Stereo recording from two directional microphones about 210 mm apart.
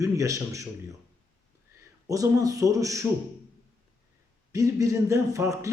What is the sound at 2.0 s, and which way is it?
Speech, 15° right (ahead or behind).